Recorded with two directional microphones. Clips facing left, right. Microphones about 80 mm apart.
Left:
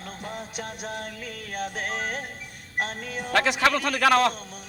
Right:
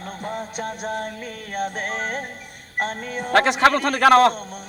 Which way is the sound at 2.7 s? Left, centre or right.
Right.